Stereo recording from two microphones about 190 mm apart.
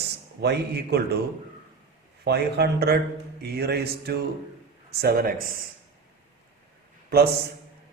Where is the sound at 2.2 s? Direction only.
60° right (ahead or behind).